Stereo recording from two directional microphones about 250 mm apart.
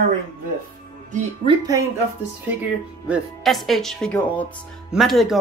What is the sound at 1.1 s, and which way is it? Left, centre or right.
Speech, right.